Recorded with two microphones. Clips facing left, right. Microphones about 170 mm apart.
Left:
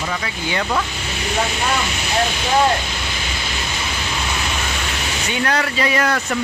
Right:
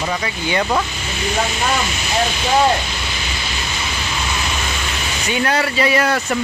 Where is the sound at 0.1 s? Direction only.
20° right (ahead or behind).